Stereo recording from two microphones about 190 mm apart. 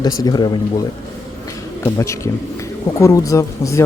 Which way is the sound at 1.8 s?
15° left (ahead or behind).